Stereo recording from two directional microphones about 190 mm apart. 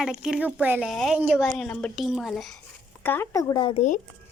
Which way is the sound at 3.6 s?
25° left (ahead or behind).